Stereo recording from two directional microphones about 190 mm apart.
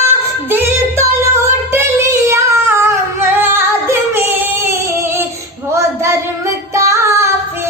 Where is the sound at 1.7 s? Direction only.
15° right (ahead or behind).